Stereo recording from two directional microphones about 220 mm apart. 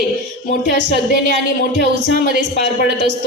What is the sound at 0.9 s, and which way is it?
Speech, 50° right (ahead or behind).